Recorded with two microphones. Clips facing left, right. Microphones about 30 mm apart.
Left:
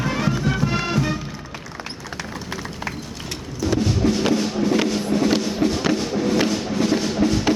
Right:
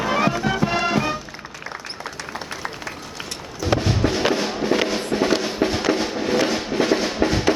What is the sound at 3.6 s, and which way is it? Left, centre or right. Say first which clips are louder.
Music: left 1 dB; right.